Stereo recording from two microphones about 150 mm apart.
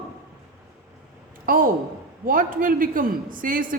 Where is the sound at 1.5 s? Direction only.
70° right (ahead or behind).